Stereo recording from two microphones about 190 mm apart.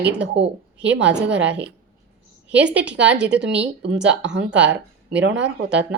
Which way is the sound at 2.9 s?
70° right (ahead or behind).